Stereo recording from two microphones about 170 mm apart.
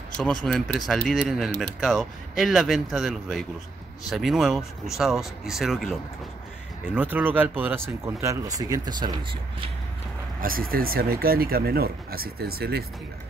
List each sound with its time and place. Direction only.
0.5 s speech: 5° left (ahead or behind); by 9.7 s 30° right (ahead or behind)
10.4 s speech: 60° right (ahead or behind)